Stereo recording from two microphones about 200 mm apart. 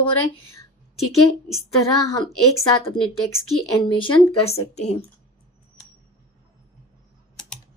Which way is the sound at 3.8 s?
25° left (ahead or behind).